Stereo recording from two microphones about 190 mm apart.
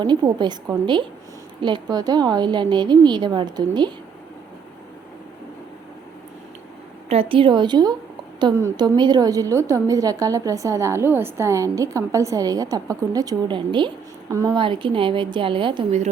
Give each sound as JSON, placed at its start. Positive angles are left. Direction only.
{"t": 0.0, "sound": "a woman's voice", "side_deg": -25}
{"t": 7.1, "sound": "a woman's voice", "side_deg": -30}